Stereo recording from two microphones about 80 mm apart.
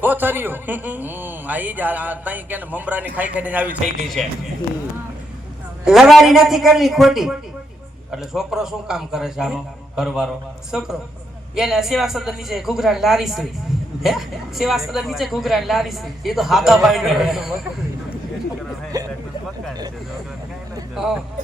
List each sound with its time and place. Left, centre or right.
0.0 s a man's voice: right
5.8 s a man's voice: centre
18.9 s a sound: right
20.9 s speech: centre